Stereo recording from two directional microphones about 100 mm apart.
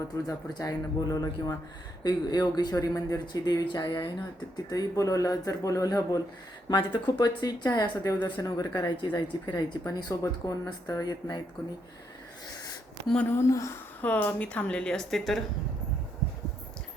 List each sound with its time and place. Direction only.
0.0 s speech: 35° left (ahead or behind)
6.7 s speech: 45° left (ahead or behind)
13.3 s speech: 30° left (ahead or behind)
14.0 s a woman's voice: 15° left (ahead or behind)